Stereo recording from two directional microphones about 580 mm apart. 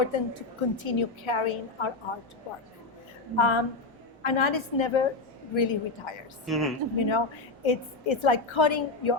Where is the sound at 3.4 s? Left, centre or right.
Left.